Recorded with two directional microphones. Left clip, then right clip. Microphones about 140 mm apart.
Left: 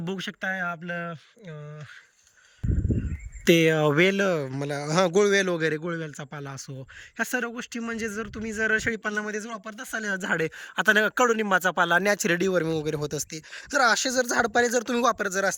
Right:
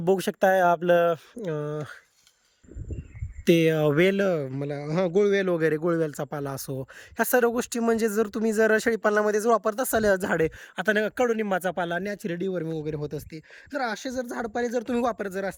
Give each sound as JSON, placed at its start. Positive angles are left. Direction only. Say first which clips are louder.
{"t": 0.0, "sound": "speech", "louder": "right 10 dB", "side_deg": -40}
{"t": 3.4, "sound": "speech", "louder": "left 1 dB", "side_deg": -10}
{"t": 5.5, "sound": "speech", "louder": "right 3 dB", "side_deg": -25}
{"t": 5.9, "sound": "speech", "louder": "right 7 dB", "side_deg": -40}